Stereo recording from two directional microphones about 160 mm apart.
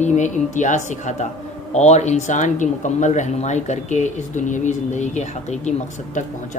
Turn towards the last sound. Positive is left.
turn(degrees=50)  # may be behind; listen again after turning